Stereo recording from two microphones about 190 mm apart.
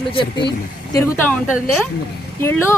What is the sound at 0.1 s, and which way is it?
Speech, 30° left (ahead or behind).